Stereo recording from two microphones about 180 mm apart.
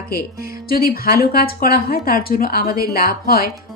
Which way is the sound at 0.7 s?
55° left (ahead or behind).